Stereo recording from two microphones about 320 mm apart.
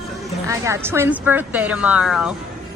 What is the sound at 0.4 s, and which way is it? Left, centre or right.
A woman's voice, centre.